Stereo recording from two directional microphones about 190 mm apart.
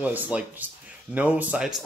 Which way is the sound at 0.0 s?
10° right (ahead or behind).